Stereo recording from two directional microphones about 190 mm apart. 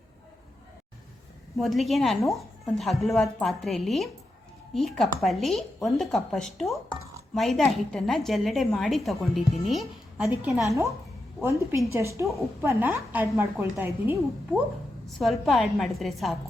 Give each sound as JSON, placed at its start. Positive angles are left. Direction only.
{"t": 1.5, "sound": "a woman's voice", "side_deg": 0}
{"t": 10.7, "sound": "a woman's voice", "side_deg": -15}
{"t": 15.0, "sound": "speech", "side_deg": 0}